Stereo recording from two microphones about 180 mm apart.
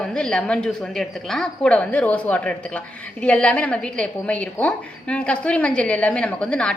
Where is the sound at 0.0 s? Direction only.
5° left (ahead or behind).